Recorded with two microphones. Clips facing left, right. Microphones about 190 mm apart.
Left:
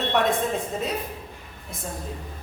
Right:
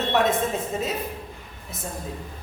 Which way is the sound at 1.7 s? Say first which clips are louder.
Even; centre (ahead or behind).